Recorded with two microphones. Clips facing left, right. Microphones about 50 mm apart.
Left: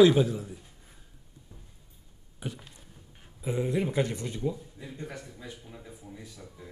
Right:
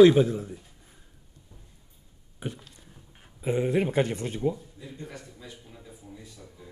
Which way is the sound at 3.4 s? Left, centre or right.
Right.